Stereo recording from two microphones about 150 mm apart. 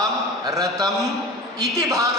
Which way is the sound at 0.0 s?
25° right (ahead or behind).